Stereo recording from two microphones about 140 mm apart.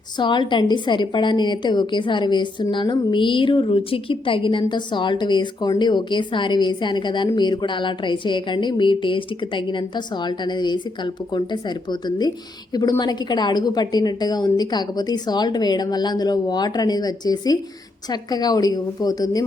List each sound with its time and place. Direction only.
0.2 s a woman's voice: 35° left (ahead or behind)